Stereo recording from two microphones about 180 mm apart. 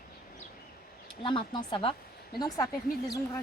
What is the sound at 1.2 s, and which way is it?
Speech, 25° left (ahead or behind).